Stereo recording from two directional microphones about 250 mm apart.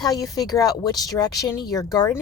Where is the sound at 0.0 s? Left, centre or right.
Centre.